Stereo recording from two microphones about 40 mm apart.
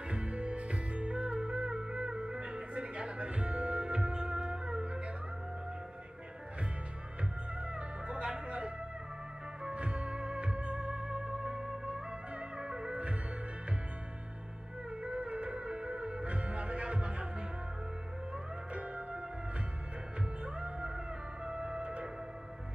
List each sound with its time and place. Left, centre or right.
0.1 s music: right
7.6 s music: right
9.8 s music: right
15.0 s music: right
18.7 s music: right
20.4 s music: right